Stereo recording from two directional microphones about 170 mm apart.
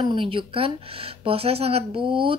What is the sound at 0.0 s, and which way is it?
A woman's voice, 30° right (ahead or behind).